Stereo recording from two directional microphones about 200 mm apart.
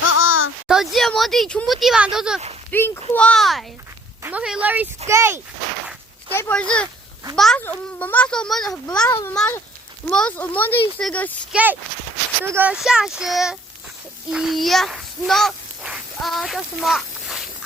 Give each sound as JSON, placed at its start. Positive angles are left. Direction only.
{"t": 0.1, "sound": "a sound", "side_deg": 80}
{"t": 0.7, "sound": "a child's voice", "side_deg": 0}
{"t": 2.7, "sound": "a child's voice", "side_deg": 10}
{"t": 6.3, "sound": "a child's voice", "side_deg": 10}
{"t": 11.5, "sound": "a child's voice", "side_deg": -10}